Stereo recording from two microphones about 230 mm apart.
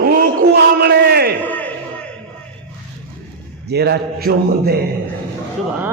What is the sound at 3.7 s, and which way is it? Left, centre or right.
A man's voice, right.